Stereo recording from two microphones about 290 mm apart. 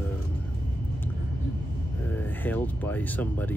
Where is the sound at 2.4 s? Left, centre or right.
Centre.